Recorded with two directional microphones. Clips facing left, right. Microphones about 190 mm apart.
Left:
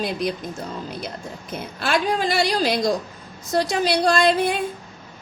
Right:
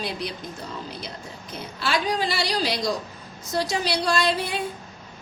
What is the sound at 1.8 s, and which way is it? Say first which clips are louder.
A woman's voice: left 3 dB; 50° left (ahead or behind).